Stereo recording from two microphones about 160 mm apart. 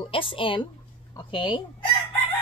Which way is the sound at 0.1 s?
35° left (ahead or behind).